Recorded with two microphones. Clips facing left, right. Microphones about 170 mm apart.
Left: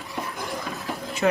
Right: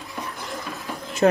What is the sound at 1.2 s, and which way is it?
Speech, 40° right (ahead or behind).